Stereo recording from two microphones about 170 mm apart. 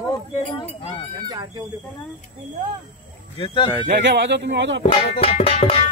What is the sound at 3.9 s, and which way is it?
Speech, 90° right.